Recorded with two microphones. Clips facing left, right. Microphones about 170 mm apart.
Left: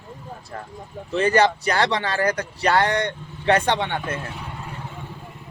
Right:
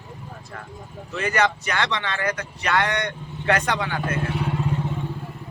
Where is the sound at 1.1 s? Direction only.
30° left (ahead or behind).